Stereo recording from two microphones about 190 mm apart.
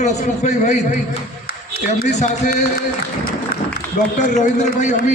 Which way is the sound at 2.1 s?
35° left (ahead or behind).